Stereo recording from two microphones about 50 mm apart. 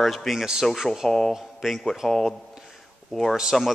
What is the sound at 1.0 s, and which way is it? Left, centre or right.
Speech, centre.